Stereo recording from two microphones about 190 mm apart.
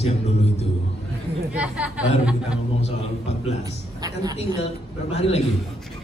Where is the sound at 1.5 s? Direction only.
5° right (ahead or behind).